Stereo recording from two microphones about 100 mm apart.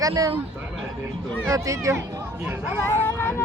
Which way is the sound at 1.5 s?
30° right (ahead or behind).